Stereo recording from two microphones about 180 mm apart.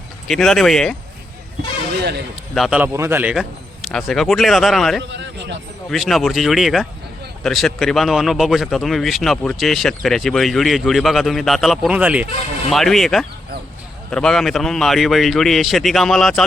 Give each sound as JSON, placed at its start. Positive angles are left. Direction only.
{"t": 0.3, "sound": "speech", "side_deg": 0}
{"t": 2.6, "sound": "speech", "side_deg": -5}
{"t": 5.1, "sound": "a man's voice", "side_deg": -80}
{"t": 5.9, "sound": "speech", "side_deg": 0}